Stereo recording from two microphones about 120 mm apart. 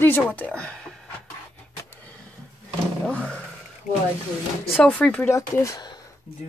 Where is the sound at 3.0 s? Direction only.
10° left (ahead or behind).